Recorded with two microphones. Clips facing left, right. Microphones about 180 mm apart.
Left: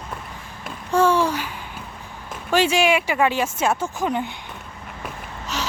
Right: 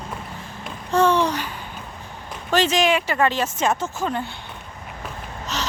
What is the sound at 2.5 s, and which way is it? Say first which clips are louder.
A woman's voice: left 1 dB; 10° left (ahead or behind).